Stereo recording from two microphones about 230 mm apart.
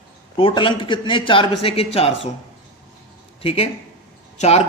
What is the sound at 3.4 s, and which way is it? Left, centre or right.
A man's voice, left.